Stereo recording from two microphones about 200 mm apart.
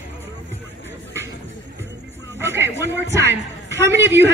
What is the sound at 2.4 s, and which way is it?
A man's voice, 10° right (ahead or behind).